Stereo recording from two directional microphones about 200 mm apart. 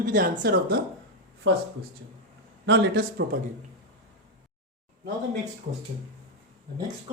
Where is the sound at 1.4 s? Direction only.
60° right (ahead or behind).